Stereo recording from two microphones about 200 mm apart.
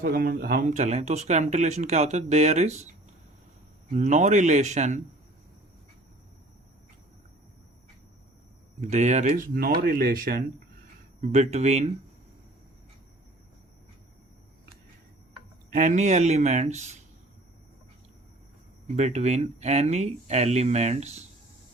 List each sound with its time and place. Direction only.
0.0 s speech: 45° right (ahead or behind)
3.9 s speech: 35° right (ahead or behind)
8.9 s speech: 35° right (ahead or behind)
9.6 s speech: 50° right (ahead or behind)
11.2 s speech: 35° right (ahead or behind)
15.7 s speech: 40° right (ahead or behind)
18.9 s speech: 35° right (ahead or behind)